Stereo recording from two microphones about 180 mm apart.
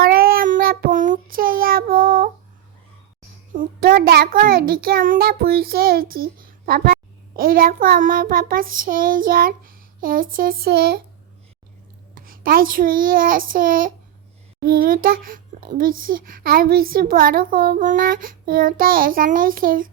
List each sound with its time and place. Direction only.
0.1 s child singing: 55° right (ahead or behind)
3.5 s a child's voice: 50° right (ahead or behind)
12.1 s a child's voice: 50° right (ahead or behind)